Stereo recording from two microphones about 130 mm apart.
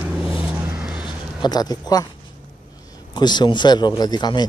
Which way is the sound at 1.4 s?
30° left (ahead or behind).